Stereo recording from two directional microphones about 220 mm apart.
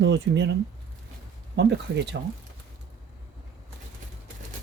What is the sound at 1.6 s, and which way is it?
Speech, 50° right (ahead or behind).